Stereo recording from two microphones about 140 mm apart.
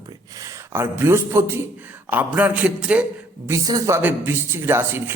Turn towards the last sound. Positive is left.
turn(degrees=-15)  # may be behind; listen again after turning